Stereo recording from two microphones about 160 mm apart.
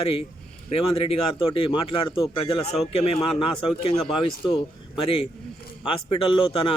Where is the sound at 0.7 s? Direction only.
35° left (ahead or behind).